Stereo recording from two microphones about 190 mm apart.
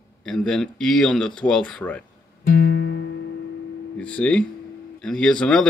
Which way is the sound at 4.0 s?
5° left (ahead or behind).